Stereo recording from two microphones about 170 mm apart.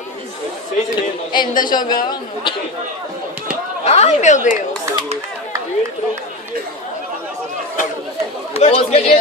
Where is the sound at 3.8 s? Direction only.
40° left (ahead or behind).